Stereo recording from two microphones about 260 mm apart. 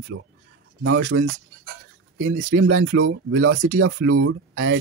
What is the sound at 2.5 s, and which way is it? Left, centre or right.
Speech, right.